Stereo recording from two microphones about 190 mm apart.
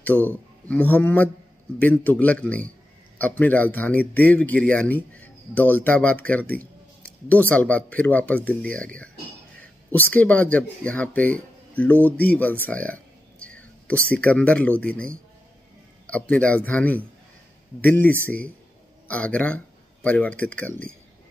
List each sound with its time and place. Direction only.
0.0 s speech: 10° left (ahead or behind)